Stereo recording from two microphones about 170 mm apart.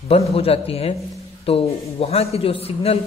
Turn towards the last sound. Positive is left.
turn(degrees=35)  # may be behind; listen again after turning